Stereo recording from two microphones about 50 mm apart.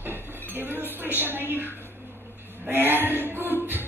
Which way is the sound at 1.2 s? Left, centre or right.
Right.